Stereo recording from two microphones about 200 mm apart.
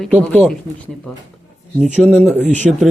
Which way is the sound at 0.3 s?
5° left (ahead or behind).